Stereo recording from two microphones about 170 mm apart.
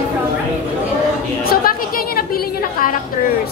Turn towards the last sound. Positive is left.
turn(degrees=60)  # may be behind; listen again after turning